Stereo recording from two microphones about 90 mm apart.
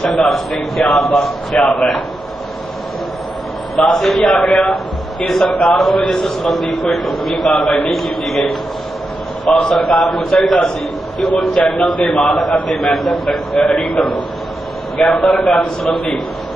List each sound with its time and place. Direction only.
0.0 s a man's voice: 5° left (ahead or behind)
3.8 s a man's voice: centre (ahead or behind)
9.5 s a man's voice: 5° left (ahead or behind)
13.6 s a man's voice: 10° left (ahead or behind)